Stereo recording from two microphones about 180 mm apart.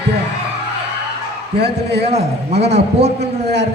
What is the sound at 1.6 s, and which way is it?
Speech, 65° right (ahead or behind).